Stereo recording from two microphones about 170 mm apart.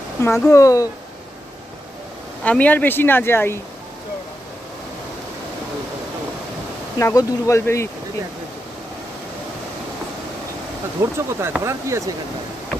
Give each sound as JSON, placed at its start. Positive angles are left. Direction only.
{"t": 0.2, "sound": "speech", "side_deg": 15}
{"t": 2.4, "sound": "speech", "side_deg": 10}
{"t": 7.0, "sound": "speech", "side_deg": 20}
{"t": 11.0, "sound": "speech", "side_deg": -15}